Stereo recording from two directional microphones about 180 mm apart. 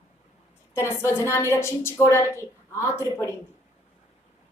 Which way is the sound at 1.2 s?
15° left (ahead or behind).